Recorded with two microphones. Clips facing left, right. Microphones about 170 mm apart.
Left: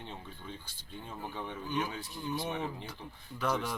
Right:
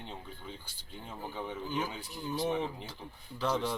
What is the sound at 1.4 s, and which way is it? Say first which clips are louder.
Speech: even; 10° right (ahead or behind).